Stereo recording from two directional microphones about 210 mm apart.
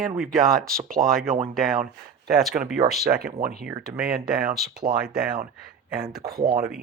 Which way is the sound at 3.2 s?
45° right (ahead or behind).